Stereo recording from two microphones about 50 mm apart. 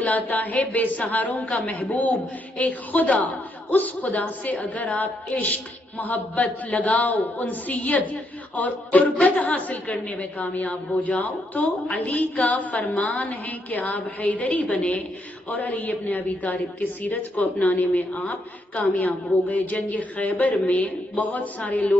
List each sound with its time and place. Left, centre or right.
0.0 s a woman's voice: left